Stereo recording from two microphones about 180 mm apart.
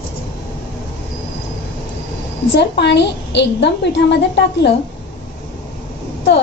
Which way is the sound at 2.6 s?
70° left (ahead or behind).